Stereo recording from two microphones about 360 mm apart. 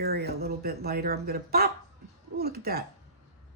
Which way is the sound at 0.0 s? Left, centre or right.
Right.